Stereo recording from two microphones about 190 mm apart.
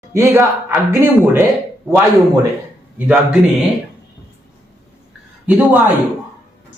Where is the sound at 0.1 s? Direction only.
15° right (ahead or behind).